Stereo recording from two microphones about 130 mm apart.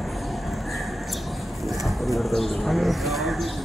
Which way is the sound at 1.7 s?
Centre (ahead or behind).